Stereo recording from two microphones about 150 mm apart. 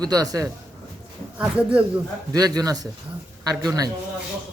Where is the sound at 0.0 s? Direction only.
25° right (ahead or behind).